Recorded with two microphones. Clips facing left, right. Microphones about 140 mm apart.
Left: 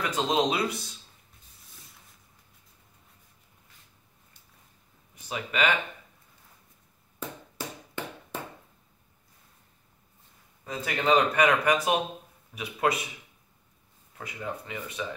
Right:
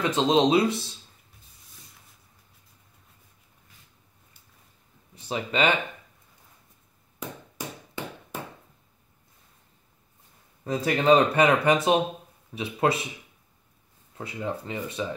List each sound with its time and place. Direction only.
0.0 s speech: 25° right (ahead or behind)
5.1 s speech: 30° right (ahead or behind)
7.2 s chop: 10° right (ahead or behind)
10.6 s speech: 35° right (ahead or behind)
14.1 s speech: 30° right (ahead or behind)